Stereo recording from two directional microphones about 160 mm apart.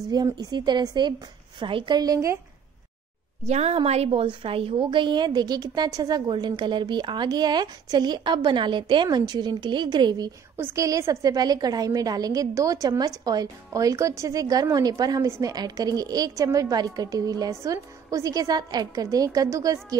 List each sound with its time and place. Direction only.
0.1 s a woman's voice: 25° right (ahead or behind)
3.4 s a woman's voice: 45° right (ahead or behind); by 20.0 s 20° right (ahead or behind)